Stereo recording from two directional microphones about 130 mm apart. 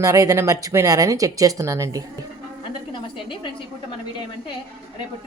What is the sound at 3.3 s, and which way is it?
Speech, 40° left (ahead or behind).